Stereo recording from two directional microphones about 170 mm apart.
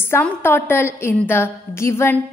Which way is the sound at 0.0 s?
15° left (ahead or behind).